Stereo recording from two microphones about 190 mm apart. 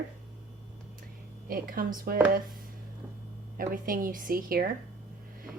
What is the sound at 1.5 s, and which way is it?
Speech, 50° right (ahead or behind).